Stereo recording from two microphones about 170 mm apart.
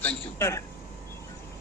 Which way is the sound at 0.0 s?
10° left (ahead or behind).